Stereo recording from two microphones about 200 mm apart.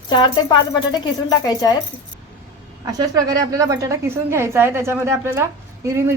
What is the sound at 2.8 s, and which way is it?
A woman's voice, 20° right (ahead or behind).